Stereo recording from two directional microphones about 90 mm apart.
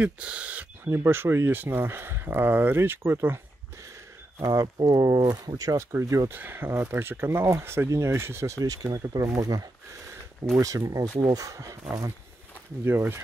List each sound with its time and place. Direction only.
0.0 s speech: 15° right (ahead or behind)
0.8 s speech: 25° right (ahead or behind)
4.4 s speech: 40° right (ahead or behind)
12.8 s speech: 25° right (ahead or behind)